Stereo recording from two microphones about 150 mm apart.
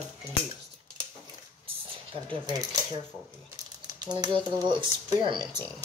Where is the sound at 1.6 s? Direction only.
35° right (ahead or behind).